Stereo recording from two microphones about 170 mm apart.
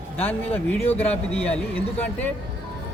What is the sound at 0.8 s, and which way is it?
Speech, 35° left (ahead or behind).